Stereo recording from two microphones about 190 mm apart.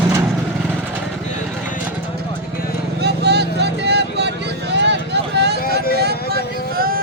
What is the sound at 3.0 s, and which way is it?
Vehicle, 60° right (ahead or behind).